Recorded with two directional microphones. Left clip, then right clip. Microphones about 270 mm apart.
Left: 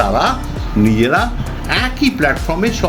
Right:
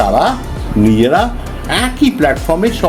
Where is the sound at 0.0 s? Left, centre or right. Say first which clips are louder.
Right 3 dB; centre.